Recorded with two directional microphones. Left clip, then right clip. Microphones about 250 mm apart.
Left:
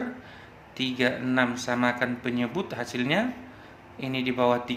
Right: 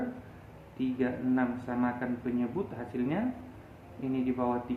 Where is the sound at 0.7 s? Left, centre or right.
Left.